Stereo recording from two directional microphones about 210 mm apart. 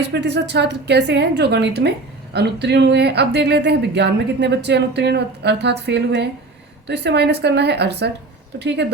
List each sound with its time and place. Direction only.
0.0 s speech: 55° right (ahead or behind)